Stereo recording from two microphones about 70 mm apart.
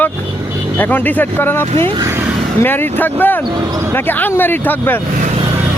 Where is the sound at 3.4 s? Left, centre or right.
Right.